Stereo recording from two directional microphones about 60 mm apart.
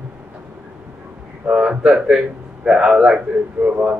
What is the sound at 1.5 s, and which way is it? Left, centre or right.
A man's voice, centre.